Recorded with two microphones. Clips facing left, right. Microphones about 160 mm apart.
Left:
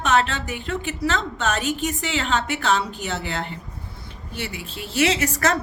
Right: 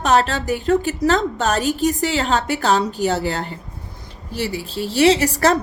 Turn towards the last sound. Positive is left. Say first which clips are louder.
# right 7 dB
turn(degrees=-35)  # may be behind; listen again after turning